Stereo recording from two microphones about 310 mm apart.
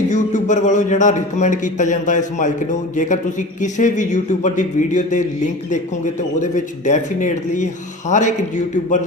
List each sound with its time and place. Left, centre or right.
0.1 s a man's voice: left
6.4 s a man's voice: left